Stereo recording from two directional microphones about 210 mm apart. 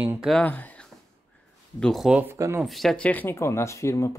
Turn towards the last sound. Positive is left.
turn(degrees=15)  # may be behind; listen again after turning